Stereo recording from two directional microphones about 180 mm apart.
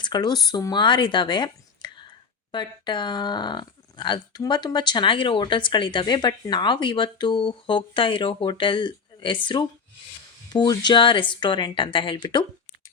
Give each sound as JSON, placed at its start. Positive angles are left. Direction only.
{"t": 0.0, "sound": "speech", "side_deg": 25}